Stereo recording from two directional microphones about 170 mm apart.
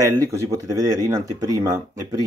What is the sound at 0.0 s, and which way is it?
Speech, 20° right (ahead or behind).